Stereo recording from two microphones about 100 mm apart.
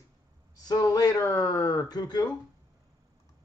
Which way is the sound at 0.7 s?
40° left (ahead or behind).